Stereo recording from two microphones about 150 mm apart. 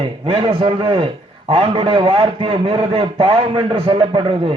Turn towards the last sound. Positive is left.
turn(degrees=-35)  # may be behind; listen again after turning